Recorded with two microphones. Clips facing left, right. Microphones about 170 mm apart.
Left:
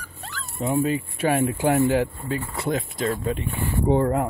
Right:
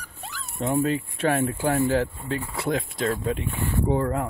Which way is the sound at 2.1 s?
5° left (ahead or behind).